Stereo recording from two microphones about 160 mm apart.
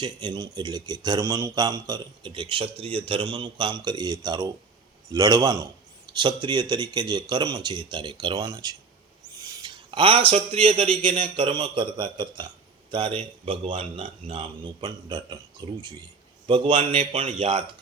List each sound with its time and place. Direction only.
0.0 s speech: 25° right (ahead or behind)